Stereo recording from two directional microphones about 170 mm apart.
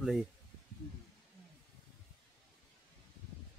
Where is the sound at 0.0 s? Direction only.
Centre (ahead or behind).